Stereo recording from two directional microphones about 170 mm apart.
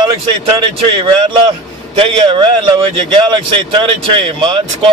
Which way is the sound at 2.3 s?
30° right (ahead or behind).